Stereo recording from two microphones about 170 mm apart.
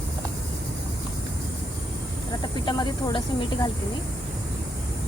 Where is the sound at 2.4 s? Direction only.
25° left (ahead or behind).